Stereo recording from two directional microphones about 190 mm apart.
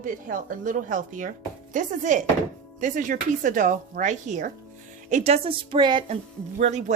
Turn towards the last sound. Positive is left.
turn(degrees=-35)  # may be behind; listen again after turning